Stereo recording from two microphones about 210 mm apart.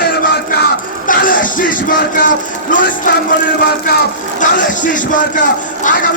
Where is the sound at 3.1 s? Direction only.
35° left (ahead or behind).